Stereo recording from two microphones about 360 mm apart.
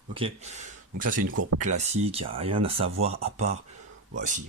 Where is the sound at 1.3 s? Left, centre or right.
Right.